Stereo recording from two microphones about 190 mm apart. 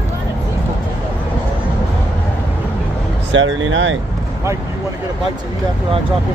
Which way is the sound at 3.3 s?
85° right.